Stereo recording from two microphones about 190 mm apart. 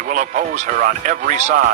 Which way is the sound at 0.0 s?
40° right (ahead or behind).